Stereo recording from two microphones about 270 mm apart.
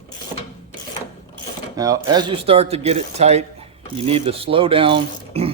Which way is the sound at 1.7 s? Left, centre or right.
Centre.